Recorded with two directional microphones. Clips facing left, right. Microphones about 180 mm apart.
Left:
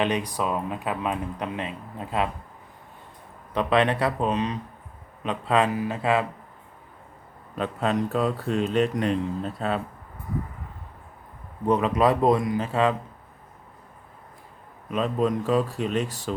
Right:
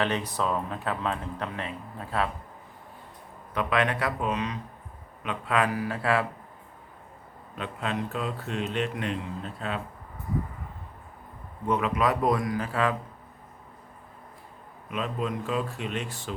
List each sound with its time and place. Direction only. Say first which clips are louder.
0.0 s speech: left 2 dB; 15° left (ahead or behind)
3.5 s a man's voice: left 4 dB; 30° left (ahead or behind)
7.5 s speech: left 6 dB; 40° left (ahead or behind)
11.6 s a man's voice: left 5 dB; 35° left (ahead or behind)
14.8 s speech: left 7 dB; 40° left (ahead or behind)